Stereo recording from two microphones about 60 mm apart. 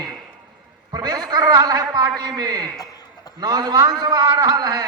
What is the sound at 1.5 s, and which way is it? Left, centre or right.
Speech, right.